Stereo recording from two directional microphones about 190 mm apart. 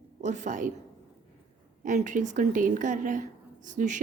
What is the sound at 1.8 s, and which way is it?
A woman's voice, 40° right (ahead or behind).